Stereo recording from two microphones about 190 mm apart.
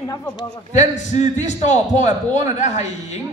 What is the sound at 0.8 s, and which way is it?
A man's voice, 40° left (ahead or behind).